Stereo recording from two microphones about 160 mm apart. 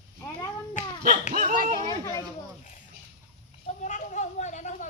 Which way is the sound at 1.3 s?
55° right (ahead or behind).